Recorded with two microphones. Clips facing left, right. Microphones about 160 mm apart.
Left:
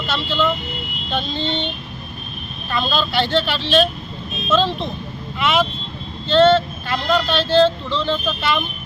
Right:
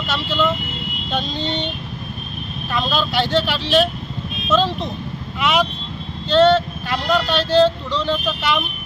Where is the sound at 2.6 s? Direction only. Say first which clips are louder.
Even; centre (ahead or behind).